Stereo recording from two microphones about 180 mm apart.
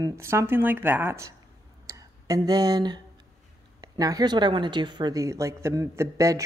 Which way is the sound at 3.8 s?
20° right (ahead or behind).